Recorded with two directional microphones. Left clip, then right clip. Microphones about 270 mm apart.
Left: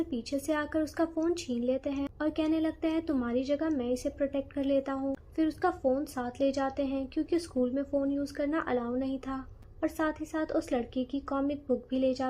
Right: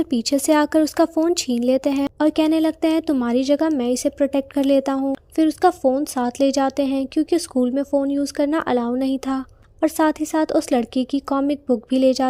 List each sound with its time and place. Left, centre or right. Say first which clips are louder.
0.0 s speech: right 13 dB; right